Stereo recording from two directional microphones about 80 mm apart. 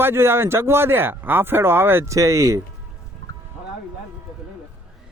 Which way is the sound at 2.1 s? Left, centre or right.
Right.